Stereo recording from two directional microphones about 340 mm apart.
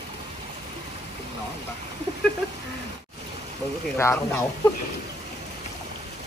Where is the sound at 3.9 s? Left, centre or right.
Centre.